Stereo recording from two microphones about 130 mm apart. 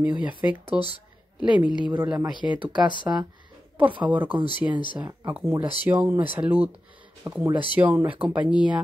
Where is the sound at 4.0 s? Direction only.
15° right (ahead or behind).